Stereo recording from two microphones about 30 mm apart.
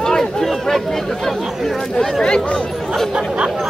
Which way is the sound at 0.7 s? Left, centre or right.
Centre.